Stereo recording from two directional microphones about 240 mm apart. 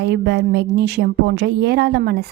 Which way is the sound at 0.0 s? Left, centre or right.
Right.